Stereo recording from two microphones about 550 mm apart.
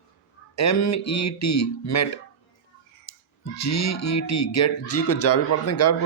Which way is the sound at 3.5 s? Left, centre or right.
Left.